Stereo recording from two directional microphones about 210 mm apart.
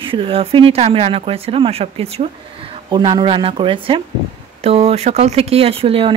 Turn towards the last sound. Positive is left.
turn(degrees=-25)  # may be behind; listen again after turning